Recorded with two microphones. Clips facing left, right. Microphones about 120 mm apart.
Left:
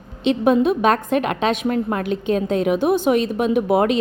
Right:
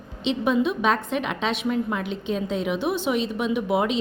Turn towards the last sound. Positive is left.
turn(degrees=50)  # may be behind; listen again after turning